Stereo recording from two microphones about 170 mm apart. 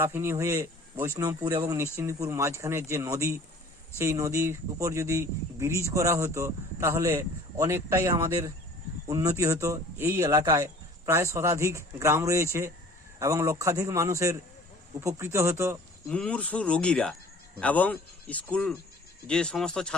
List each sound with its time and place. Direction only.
0.0 s speech: 15° right (ahead or behind)
16.0 s speech: 5° left (ahead or behind)